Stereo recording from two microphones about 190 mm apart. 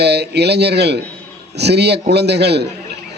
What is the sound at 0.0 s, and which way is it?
A man's voice, 60° right (ahead or behind).